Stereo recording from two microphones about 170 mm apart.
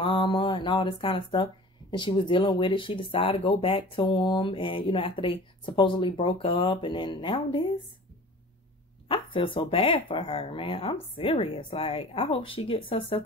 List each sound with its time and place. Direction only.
0.0 s speech: 30° left (ahead or behind)
9.1 s speech: 30° left (ahead or behind)